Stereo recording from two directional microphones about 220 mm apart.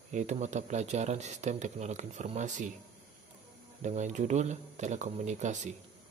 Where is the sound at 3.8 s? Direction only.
35° right (ahead or behind).